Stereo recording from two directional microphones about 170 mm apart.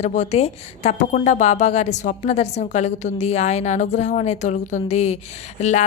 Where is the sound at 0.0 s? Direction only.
40° left (ahead or behind).